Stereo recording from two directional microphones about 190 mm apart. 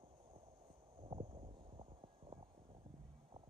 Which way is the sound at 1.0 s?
30° right (ahead or behind).